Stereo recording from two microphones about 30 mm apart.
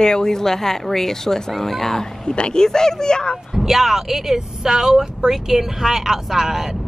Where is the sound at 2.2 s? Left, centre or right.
Left.